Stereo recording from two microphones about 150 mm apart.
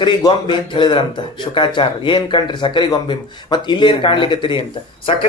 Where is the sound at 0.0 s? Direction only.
30° left (ahead or behind).